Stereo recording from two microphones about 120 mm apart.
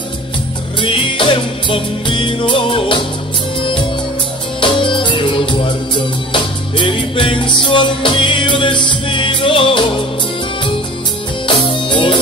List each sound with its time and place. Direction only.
0.7 s music: 45° left (ahead or behind)
4.6 s music: 45° left (ahead or behind)
11.6 s music: 40° left (ahead or behind)